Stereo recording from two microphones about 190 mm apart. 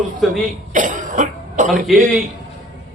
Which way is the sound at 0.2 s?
Centre (ahead or behind).